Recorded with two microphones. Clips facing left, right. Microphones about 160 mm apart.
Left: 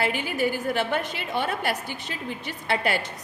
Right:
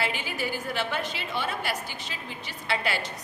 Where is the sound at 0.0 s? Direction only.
50° left (ahead or behind).